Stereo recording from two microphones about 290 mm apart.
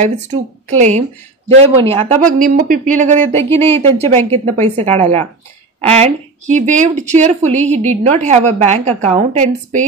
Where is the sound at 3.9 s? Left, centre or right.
Right.